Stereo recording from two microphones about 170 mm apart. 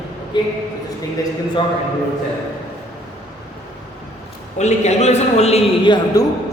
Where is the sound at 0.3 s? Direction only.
25° left (ahead or behind).